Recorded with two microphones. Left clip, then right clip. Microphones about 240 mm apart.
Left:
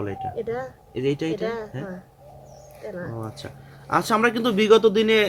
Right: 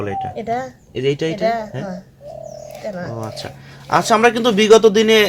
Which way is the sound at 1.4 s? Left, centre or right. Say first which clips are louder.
Right 10 dB; left.